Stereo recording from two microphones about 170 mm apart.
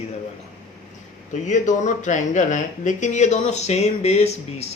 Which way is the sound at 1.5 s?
45° left (ahead or behind).